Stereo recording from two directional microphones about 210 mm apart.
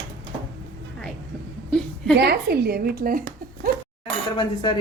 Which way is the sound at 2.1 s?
50° right (ahead or behind).